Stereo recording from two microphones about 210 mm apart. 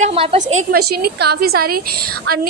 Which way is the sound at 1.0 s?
50° right (ahead or behind).